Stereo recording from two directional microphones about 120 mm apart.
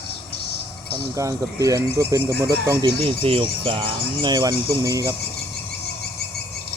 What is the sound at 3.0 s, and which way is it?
Speech, 50° right (ahead or behind).